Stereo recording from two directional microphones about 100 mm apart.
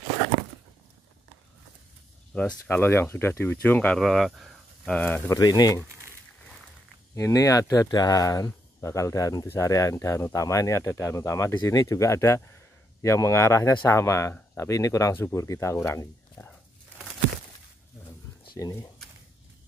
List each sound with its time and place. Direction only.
2.3 s speech: 15° left (ahead or behind)
4.0 s speech: centre (ahead or behind)
4.8 s speech: 10° left (ahead or behind)
5.3 s speech: 40° left (ahead or behind)
7.2 s speech: 35° left (ahead or behind)
18.6 s speech: 35° left (ahead or behind)